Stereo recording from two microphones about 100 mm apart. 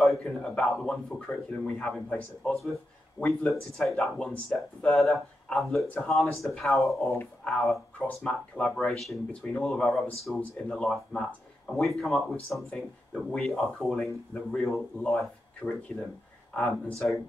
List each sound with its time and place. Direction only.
0.0 s speech: 5° left (ahead or behind)
15.6 s speech: 15° left (ahead or behind)
16.5 s speech: 5° left (ahead or behind)